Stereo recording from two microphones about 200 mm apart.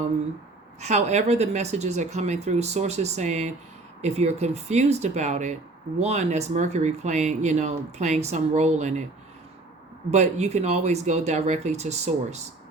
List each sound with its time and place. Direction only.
0.8 s speech: 35° right (ahead or behind)
10.1 s speech: 35° right (ahead or behind)